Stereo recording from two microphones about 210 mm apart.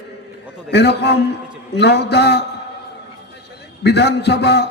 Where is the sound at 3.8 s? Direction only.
50° left (ahead or behind).